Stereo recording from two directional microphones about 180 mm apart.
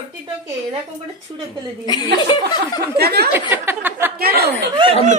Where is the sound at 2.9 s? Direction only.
60° right (ahead or behind).